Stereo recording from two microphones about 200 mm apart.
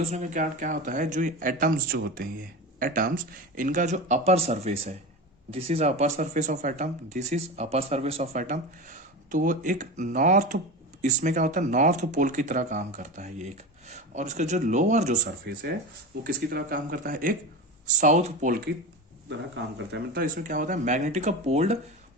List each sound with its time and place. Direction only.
0.0 s speech: 35° right (ahead or behind)
16.2 s speech: 45° right (ahead or behind)
19.9 s speech: 45° right (ahead or behind)